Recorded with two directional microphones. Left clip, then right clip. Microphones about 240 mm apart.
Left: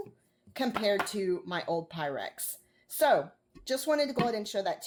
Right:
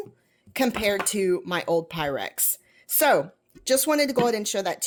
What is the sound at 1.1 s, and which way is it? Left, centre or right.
Speech, right.